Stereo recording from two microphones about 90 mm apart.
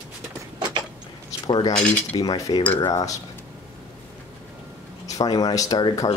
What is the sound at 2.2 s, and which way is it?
Speech, 45° left (ahead or behind).